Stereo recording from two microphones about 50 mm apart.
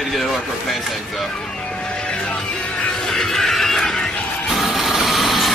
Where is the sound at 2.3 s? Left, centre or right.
Centre.